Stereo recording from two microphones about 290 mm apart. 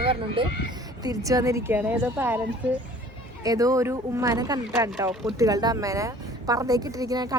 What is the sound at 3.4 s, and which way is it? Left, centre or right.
Speech, centre.